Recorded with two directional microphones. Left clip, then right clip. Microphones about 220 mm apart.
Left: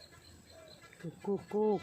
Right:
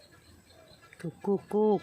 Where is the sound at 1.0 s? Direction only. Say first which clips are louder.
Right 6 dB; 45° right (ahead or behind).